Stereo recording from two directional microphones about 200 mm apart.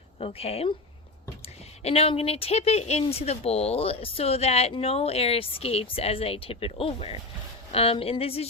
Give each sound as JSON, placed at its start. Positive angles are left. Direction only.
{"t": 0.2, "sound": "speech", "side_deg": 30}
{"t": 1.8, "sound": "speech", "side_deg": 30}